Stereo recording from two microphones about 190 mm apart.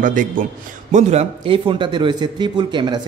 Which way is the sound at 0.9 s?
30° right (ahead or behind).